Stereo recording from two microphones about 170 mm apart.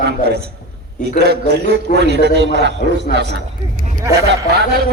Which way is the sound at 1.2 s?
75° right (ahead or behind).